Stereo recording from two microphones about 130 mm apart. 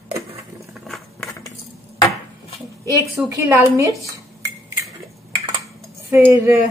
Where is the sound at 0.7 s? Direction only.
Centre (ahead or behind).